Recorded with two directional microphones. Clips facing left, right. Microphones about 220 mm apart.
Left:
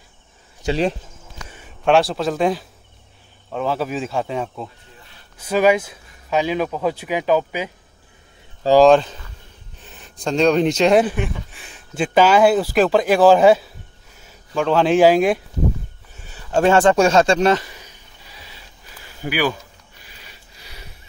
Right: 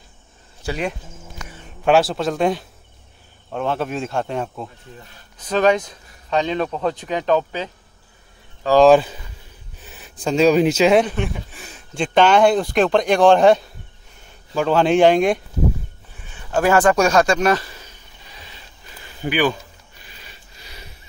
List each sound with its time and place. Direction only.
0.7 s speech: 30° left (ahead or behind)
1.9 s speech: centre (ahead or behind)
8.8 s speech: 10° right (ahead or behind)
16.2 s a sound: 40° left (ahead or behind); by 20.9 s 10° left (ahead or behind)